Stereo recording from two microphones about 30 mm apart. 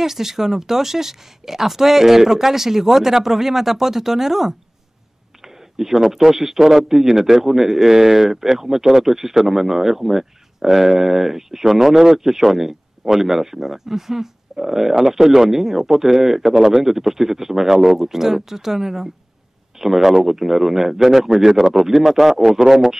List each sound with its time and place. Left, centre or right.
0.0 s a man's voice: centre